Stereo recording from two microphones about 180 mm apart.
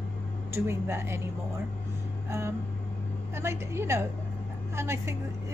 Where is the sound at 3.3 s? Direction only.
15° right (ahead or behind).